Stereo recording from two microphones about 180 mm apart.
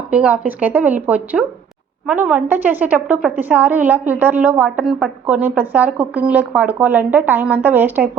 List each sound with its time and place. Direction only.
0.1 s a woman's voice: 5° right (ahead or behind)